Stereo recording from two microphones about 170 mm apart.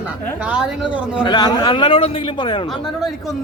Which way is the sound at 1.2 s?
25° left (ahead or behind).